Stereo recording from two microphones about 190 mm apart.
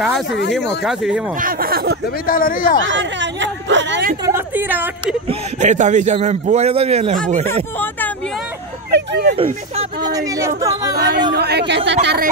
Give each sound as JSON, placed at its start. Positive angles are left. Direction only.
{"t": 0.0, "sound": "speech", "side_deg": 0}
{"t": 1.4, "sound": "speech", "side_deg": -50}
{"t": 2.2, "sound": "a man's voice", "side_deg": 45}
{"t": 2.8, "sound": "speech", "side_deg": -75}
{"t": 4.3, "sound": "a woman's voice", "side_deg": -10}
{"t": 5.6, "sound": "a man's voice", "side_deg": -40}
{"t": 8.9, "sound": "a sound", "side_deg": -60}
{"t": 9.3, "sound": "a man's voice", "side_deg": -30}
{"t": 10.0, "sound": "speech", "side_deg": -20}
{"t": 11.3, "sound": "speech", "side_deg": -60}